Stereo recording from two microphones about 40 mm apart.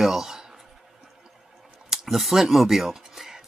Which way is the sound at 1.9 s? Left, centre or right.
Centre.